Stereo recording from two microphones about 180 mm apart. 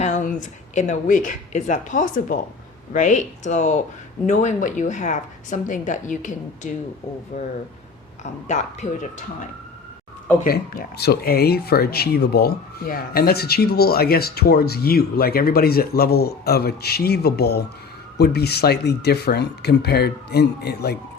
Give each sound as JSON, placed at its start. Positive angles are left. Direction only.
{"t": 0.0, "sound": "a woman's voice", "side_deg": 45}
{"t": 10.4, "sound": "speech", "side_deg": 55}